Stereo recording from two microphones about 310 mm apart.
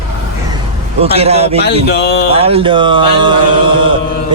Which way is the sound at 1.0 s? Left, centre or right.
Centre.